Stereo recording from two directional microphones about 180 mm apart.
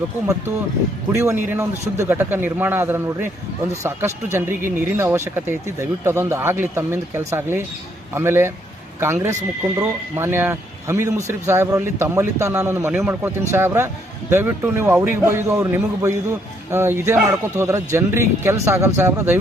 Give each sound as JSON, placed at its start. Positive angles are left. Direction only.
{"t": 1.1, "sound": "speech", "side_deg": -15}